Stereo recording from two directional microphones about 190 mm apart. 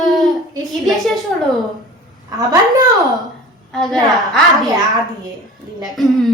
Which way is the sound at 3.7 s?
Centre (ahead or behind).